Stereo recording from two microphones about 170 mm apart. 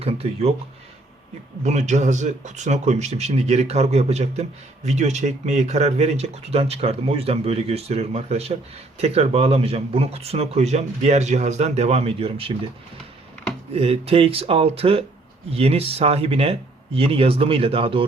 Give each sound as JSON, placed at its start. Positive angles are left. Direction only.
{"t": 0.0, "sound": "speech", "side_deg": -35}
{"t": 1.6, "sound": "speech", "side_deg": -45}
{"t": 13.7, "sound": "speech", "side_deg": -35}